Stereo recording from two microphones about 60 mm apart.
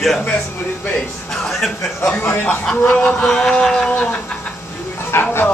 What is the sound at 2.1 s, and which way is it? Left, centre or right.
Speech, left.